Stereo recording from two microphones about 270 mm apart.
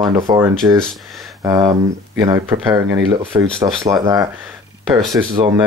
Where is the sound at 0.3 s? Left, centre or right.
Centre.